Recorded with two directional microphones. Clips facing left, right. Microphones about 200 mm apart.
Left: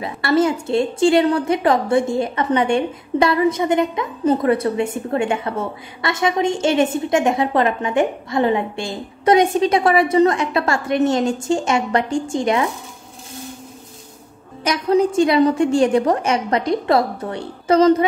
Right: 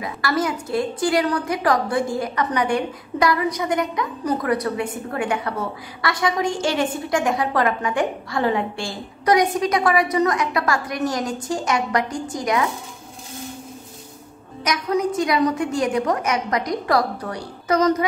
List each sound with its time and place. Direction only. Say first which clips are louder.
0.0 s a woman's voice: left 6 dB; 25° left (ahead or behind)
14.6 s a woman's voice: left 5 dB; 30° left (ahead or behind)